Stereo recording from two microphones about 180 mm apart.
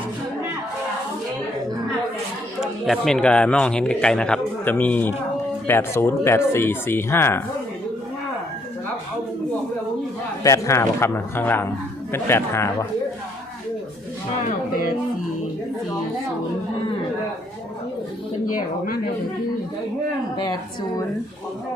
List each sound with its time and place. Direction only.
2.6 s a man's voice: centre (ahead or behind)
10.4 s speech: 15° left (ahead or behind)
14.4 s speech: 50° left (ahead or behind)
20.3 s a woman's voice: 25° left (ahead or behind)